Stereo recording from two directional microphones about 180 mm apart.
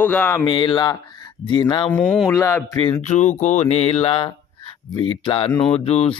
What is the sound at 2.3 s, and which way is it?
Mantra, 15° left (ahead or behind).